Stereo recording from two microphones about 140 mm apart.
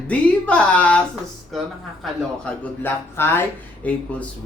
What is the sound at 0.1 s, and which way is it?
Speech, 10° left (ahead or behind).